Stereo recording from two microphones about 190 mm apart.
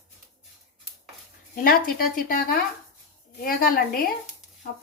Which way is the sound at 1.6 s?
50° left (ahead or behind).